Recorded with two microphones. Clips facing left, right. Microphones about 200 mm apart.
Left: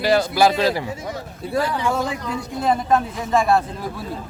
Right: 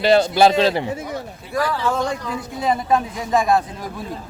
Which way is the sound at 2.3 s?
5° right (ahead or behind).